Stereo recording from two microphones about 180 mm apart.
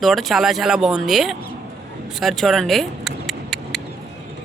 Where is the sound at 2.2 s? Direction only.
Centre (ahead or behind).